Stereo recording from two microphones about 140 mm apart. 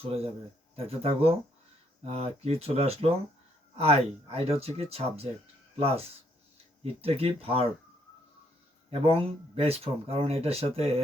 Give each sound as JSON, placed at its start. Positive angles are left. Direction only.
{"t": 0.0, "sound": "speech", "side_deg": -45}
{"t": 7.0, "sound": "speech", "side_deg": -45}
{"t": 8.9, "sound": "speech", "side_deg": -45}